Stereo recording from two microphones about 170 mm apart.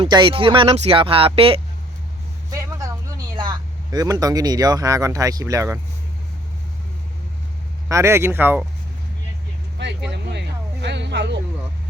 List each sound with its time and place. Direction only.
0.0 s speech: 30° right (ahead or behind)
3.3 s speech: 25° right (ahead or behind)
7.9 s speech: 15° right (ahead or behind)
9.7 s speech: 90° right